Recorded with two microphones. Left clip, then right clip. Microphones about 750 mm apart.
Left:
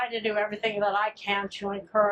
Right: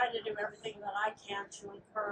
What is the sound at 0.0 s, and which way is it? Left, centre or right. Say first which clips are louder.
A woman's voice: left 7 dB; left.